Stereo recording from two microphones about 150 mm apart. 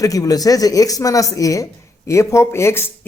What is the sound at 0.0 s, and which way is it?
Speech, 25° left (ahead or behind).